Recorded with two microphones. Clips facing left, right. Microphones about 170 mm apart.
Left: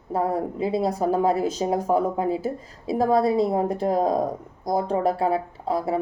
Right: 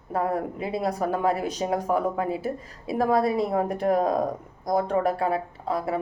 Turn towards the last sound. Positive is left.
turn(degrees=25)  # may be behind; listen again after turning